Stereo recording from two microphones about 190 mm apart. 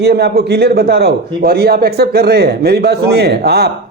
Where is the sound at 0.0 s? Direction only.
60° right (ahead or behind).